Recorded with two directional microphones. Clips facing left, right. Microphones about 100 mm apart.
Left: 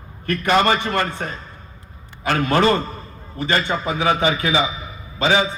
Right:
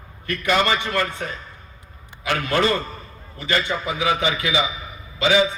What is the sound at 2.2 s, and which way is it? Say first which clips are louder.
A man's voice: left 4 dB; 35° left (ahead or behind).